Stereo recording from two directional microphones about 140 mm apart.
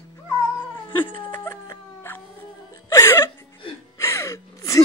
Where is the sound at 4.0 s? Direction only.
20° left (ahead or behind).